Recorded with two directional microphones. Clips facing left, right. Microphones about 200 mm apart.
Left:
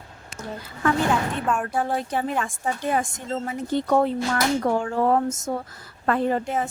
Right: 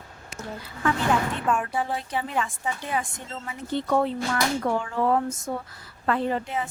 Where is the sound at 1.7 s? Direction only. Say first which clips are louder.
Left 3 dB; 50° left (ahead or behind).